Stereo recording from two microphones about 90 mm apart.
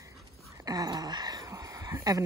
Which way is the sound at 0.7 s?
45° right (ahead or behind).